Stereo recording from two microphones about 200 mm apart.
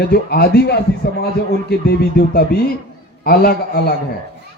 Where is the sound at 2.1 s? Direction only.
50° left (ahead or behind).